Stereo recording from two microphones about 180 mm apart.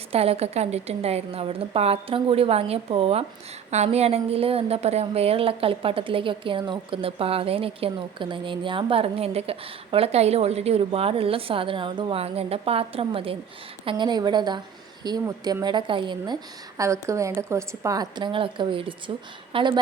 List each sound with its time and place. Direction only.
0.1 s a woman's voice: 35° right (ahead or behind)